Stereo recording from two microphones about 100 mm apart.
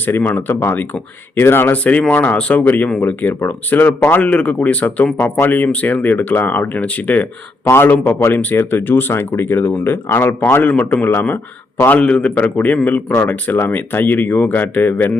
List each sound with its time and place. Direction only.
0.0 s speech: 20° left (ahead or behind)